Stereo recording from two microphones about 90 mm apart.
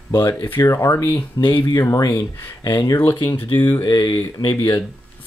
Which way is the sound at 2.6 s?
50° left (ahead or behind).